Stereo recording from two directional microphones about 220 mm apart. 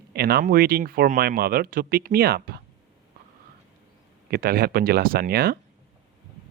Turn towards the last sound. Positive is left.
turn(degrees=-45)  # may be behind; listen again after turning